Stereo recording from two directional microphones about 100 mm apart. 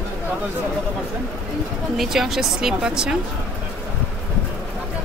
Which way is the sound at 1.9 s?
5° right (ahead or behind).